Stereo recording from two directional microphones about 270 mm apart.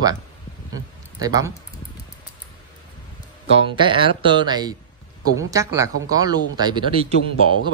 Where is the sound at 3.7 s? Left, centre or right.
Centre.